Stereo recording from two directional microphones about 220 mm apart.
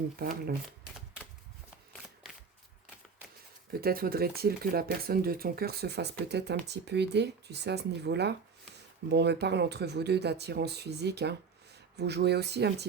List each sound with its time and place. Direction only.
0.2 s speech: 45° right (ahead or behind)
3.7 s speech: 45° right (ahead or behind)